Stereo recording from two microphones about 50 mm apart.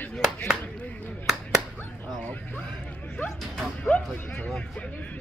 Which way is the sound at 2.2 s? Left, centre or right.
Left.